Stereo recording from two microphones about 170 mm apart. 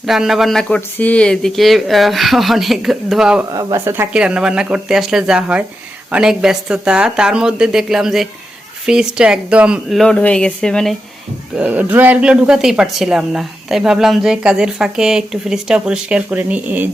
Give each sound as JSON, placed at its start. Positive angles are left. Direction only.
{"t": 0.0, "sound": "speech", "side_deg": 0}
{"t": 3.5, "sound": "speech", "side_deg": -20}
{"t": 11.5, "sound": "speech", "side_deg": -10}